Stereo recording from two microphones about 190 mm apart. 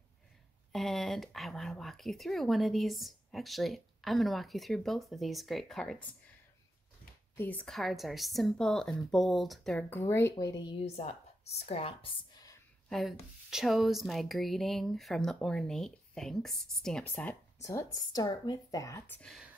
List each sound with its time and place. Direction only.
0.7 s speech: centre (ahead or behind)
7.3 s a woman's voice: 10° left (ahead or behind); by 12.5 s 25° left (ahead or behind)
13.5 s speech: centre (ahead or behind)